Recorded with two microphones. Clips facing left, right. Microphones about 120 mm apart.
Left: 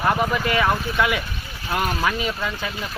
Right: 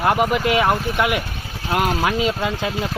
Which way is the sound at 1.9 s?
35° right (ahead or behind).